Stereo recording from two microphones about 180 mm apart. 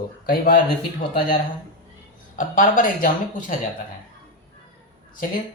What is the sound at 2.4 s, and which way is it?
Speech, 50° left (ahead or behind).